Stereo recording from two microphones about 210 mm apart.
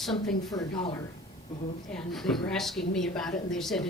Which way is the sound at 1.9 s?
Centre (ahead or behind).